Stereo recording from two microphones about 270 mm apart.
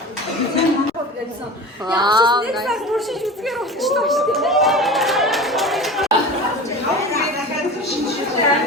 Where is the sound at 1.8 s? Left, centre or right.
Centre.